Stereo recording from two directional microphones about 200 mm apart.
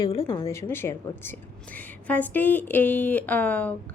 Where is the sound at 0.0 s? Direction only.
25° left (ahead or behind).